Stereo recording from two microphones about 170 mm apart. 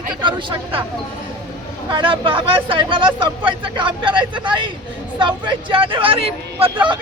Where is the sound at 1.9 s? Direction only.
30° right (ahead or behind).